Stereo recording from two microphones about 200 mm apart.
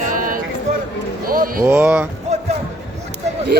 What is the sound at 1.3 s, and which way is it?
Music, 45° right (ahead or behind).